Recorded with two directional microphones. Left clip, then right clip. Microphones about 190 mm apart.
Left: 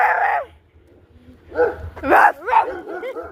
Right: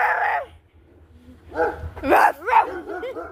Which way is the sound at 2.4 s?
55° right (ahead or behind).